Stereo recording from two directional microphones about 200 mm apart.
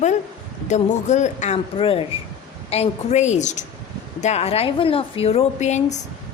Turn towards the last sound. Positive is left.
turn(degrees=35)  # may be behind; listen again after turning